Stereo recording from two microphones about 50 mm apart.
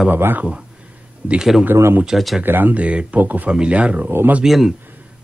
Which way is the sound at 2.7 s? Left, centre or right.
Right.